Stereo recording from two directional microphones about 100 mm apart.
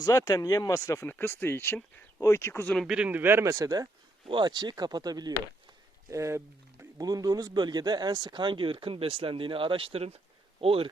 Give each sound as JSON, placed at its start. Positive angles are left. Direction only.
{"t": 0.0, "sound": "speech", "side_deg": 35}
{"t": 2.8, "sound": "speech", "side_deg": -10}
{"t": 3.5, "sound": "speech", "side_deg": -40}
{"t": 4.3, "sound": "speech", "side_deg": -50}
{"t": 6.1, "sound": "speech", "side_deg": -30}
{"t": 7.0, "sound": "speech", "side_deg": -40}
{"t": 10.6, "sound": "speech", "side_deg": -70}